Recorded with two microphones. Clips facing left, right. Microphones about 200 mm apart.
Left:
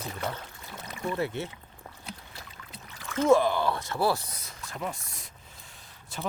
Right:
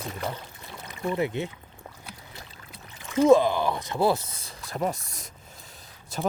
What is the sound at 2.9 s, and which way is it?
Speech, 20° right (ahead or behind).